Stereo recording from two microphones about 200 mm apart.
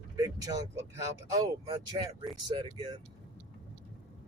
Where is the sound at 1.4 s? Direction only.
25° right (ahead or behind).